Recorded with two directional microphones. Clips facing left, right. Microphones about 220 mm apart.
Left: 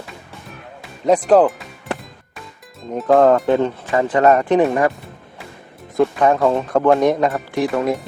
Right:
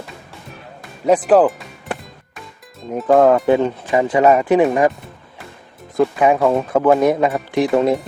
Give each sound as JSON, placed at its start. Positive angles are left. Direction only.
{"t": 1.0, "sound": "speech", "side_deg": -5}
{"t": 2.8, "sound": "speech", "side_deg": 0}
{"t": 3.4, "sound": "speech", "side_deg": -15}
{"t": 6.0, "sound": "speech", "side_deg": -10}
{"t": 7.5, "sound": "speech", "side_deg": -25}